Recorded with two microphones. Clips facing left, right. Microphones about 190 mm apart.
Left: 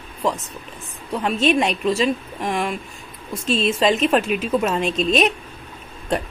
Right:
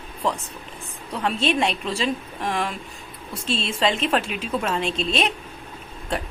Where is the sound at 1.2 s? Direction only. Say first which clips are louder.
Left 3 dB; 10° left (ahead or behind).